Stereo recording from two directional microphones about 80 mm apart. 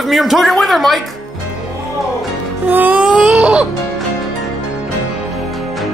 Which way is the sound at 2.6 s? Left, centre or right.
Right.